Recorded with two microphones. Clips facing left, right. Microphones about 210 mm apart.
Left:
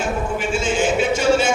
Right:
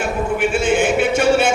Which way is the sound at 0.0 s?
60° right (ahead or behind).